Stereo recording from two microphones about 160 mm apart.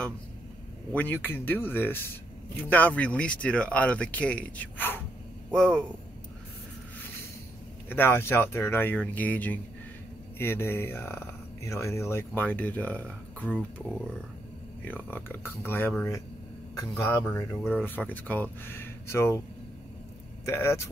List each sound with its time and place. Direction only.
0.9 s speech: 10° left (ahead or behind)
7.9 s speech: 15° left (ahead or behind)
20.4 s speech: 15° left (ahead or behind)